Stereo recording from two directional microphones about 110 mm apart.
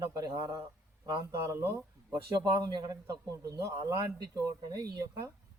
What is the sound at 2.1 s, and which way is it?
A man's voice, 35° right (ahead or behind).